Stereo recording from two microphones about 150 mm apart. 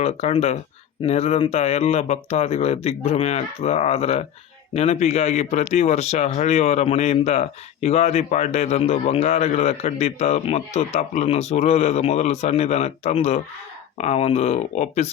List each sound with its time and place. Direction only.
0.0 s speech: 45° left (ahead or behind)